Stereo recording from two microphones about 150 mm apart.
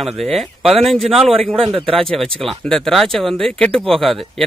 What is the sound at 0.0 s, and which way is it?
Speech, centre (ahead or behind).